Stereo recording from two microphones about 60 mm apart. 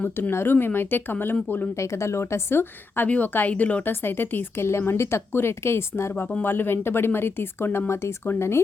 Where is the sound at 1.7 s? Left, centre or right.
Left.